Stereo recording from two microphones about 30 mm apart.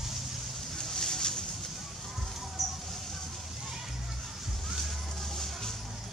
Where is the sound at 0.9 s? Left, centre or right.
Left.